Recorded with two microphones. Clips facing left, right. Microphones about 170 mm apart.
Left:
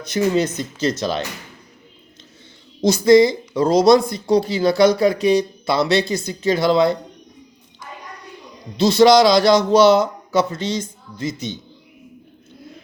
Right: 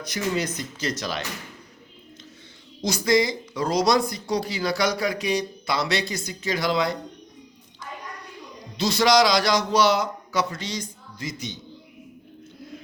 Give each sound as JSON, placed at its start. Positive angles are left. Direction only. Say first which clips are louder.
{"t": 0.0, "sound": "speech", "louder": "left 8 dB", "side_deg": 25}
{"t": 2.8, "sound": "speech", "louder": "left 10 dB", "side_deg": 25}
{"t": 9.0, "sound": "speech", "louder": "left 7 dB", "side_deg": 25}